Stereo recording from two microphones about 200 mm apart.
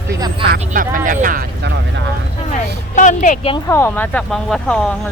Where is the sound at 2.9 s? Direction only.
40° left (ahead or behind).